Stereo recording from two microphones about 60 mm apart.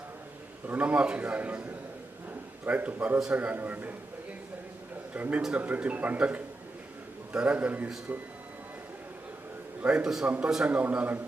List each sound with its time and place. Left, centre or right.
0.7 s a man's voice: right
5.1 s a man's voice: right
9.8 s a man's voice: centre